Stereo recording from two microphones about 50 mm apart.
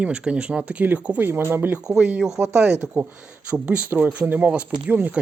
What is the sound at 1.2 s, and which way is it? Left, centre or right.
Speech, right.